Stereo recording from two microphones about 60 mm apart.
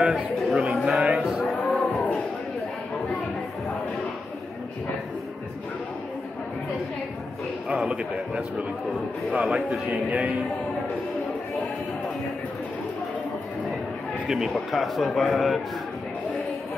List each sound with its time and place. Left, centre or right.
0.1 s speech: centre
1.0 s cattle: centre
1.4 s a sound: left
7.7 s a man's voice: centre
9.8 s music: centre
14.3 s a man's voice: centre